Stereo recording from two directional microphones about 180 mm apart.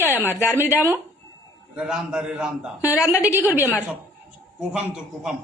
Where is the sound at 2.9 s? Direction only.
15° left (ahead or behind).